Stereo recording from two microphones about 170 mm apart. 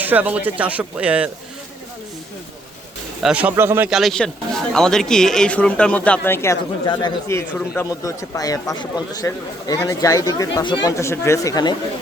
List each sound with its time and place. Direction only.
0.0 s speech: 10° right (ahead or behind)
3.2 s speech: 10° right (ahead or behind)
3.8 s speech: centre (ahead or behind); by 6.6 s 15° left (ahead or behind)
6.8 s a man's voice: 30° left (ahead or behind)
7.3 s a man's voice: 15° left (ahead or behind)
10.8 s speech: 15° left (ahead or behind)